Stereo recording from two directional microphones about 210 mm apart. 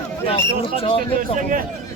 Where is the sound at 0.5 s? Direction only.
30° left (ahead or behind).